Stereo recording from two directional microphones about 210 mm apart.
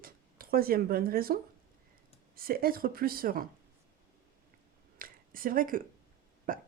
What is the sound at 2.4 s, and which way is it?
Speech, 45° right (ahead or behind).